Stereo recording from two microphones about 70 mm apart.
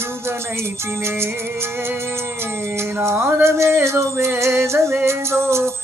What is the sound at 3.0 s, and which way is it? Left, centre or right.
Music, right.